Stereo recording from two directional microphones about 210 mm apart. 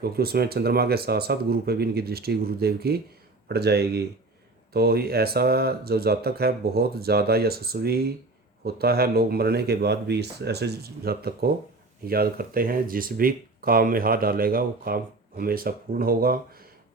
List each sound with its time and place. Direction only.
0.0 s speech: 50° right (ahead or behind)